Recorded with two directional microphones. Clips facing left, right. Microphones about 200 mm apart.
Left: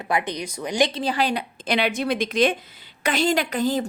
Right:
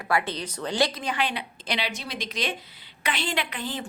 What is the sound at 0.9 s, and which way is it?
A woman's voice, 35° left (ahead or behind).